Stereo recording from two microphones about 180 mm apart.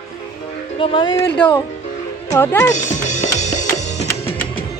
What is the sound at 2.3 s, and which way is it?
Speech, 15° left (ahead or behind).